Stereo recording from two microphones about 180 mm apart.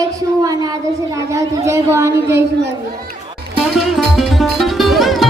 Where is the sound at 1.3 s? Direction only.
15° right (ahead or behind).